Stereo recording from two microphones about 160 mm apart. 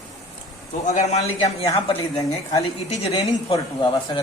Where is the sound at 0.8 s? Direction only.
45° left (ahead or behind).